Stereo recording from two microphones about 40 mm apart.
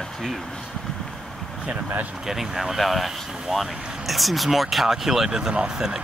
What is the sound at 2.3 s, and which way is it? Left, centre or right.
Speech, centre.